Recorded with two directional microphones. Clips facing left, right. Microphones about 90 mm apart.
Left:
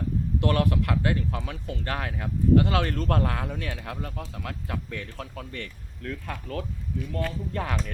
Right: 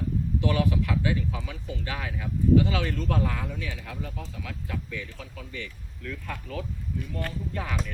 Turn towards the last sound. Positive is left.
turn(degrees=55)  # may be behind; listen again after turning